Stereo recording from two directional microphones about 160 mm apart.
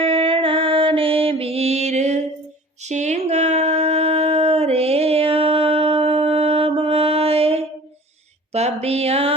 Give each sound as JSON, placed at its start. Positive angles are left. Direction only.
{"t": 0.0, "sound": "music", "side_deg": -35}
{"t": 2.8, "sound": "a sound", "side_deg": -45}
{"t": 8.5, "sound": "speech", "side_deg": -40}